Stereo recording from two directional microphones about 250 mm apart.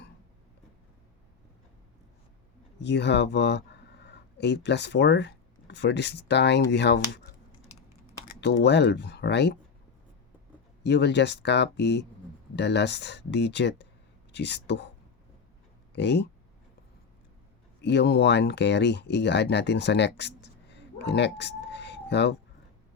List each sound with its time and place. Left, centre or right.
2.8 s speech: left
8.4 s speech: left
10.8 s speech: left
15.9 s speech: left
17.8 s speech: left